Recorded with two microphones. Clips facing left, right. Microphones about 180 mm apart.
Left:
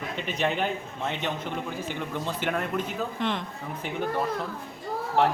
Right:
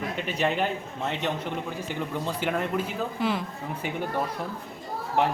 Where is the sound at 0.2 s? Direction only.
5° right (ahead or behind).